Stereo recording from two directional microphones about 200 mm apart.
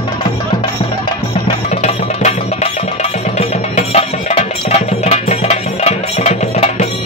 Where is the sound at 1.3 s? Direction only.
30° left (ahead or behind).